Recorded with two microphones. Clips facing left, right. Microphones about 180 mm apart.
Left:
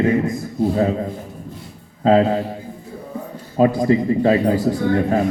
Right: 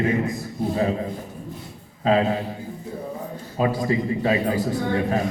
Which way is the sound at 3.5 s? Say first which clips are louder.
Left 7 dB; 40° left (ahead or behind).